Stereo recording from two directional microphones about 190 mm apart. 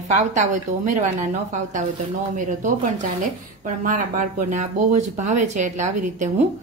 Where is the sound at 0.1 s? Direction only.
40° right (ahead or behind).